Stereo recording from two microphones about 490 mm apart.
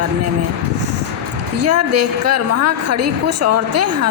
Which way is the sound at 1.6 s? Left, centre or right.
Right.